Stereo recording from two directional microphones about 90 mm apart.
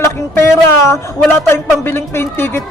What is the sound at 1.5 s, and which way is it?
Speech, 25° left (ahead or behind).